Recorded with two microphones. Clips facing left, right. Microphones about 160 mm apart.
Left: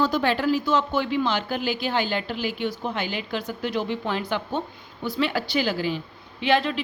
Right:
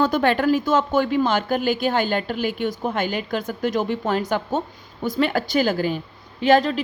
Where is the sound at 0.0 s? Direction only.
55° right (ahead or behind).